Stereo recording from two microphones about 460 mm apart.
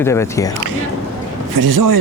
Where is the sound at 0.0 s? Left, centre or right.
Centre.